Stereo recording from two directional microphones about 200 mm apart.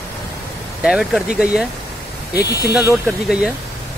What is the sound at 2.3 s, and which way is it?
Speech, 50° left (ahead or behind).